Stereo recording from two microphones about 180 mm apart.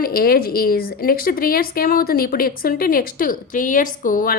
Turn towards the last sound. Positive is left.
turn(degrees=50)  # may be behind; listen again after turning